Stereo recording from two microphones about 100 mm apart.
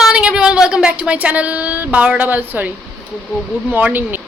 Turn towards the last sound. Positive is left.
turn(degrees=-20)  # may be behind; listen again after turning